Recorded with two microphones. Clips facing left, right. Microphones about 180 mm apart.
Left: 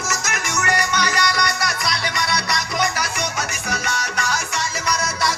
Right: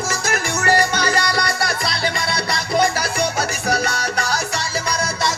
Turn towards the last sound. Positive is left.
turn(degrees=-35)  # may be behind; listen again after turning